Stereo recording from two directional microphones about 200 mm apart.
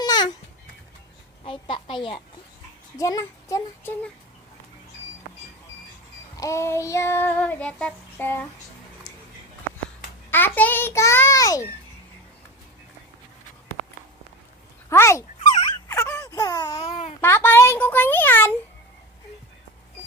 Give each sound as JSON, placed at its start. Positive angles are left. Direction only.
{"t": 0.0, "sound": "a sound", "side_deg": 20}
{"t": 1.5, "sound": "a woman's voice", "side_deg": 25}
{"t": 3.0, "sound": "child singing", "side_deg": 15}
{"t": 6.3, "sound": "child singing", "side_deg": 15}
{"t": 9.1, "sound": "a sound", "side_deg": 15}
{"t": 10.3, "sound": "child singing", "side_deg": 10}
{"t": 14.8, "sound": "speech", "side_deg": 15}
{"t": 15.9, "sound": "a sound", "side_deg": 15}
{"t": 17.2, "sound": "child singing", "side_deg": 10}